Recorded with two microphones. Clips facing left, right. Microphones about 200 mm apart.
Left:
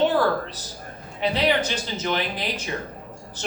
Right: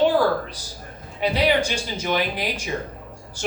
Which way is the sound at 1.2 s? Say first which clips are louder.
Right 2 dB; 10° right (ahead or behind).